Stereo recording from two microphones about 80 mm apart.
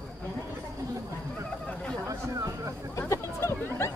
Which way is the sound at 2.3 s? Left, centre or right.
Right.